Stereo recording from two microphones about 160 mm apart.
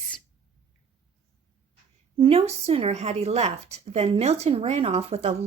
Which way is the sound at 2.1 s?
35° right (ahead or behind).